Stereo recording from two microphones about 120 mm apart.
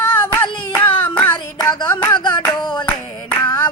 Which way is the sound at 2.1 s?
40° left (ahead or behind).